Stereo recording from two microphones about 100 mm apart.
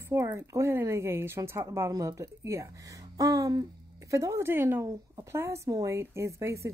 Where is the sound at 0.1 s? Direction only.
30° right (ahead or behind).